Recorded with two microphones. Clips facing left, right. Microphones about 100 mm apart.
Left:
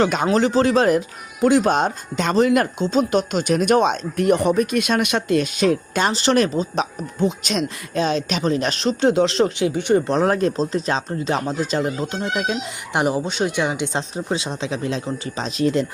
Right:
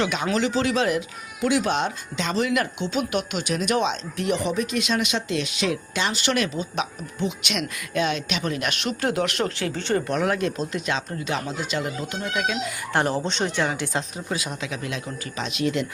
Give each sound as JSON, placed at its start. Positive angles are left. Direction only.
{"t": 0.0, "sound": "speech", "side_deg": 40}
{"t": 10.1, "sound": "speech", "side_deg": 35}
{"t": 12.9, "sound": "speech", "side_deg": 15}